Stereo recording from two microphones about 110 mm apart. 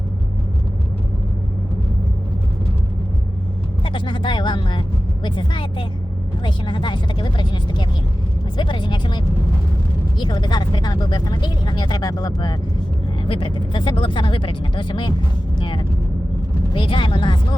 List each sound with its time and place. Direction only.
3.8 s speech: 45° left (ahead or behind)
13.2 s speech: 55° left (ahead or behind)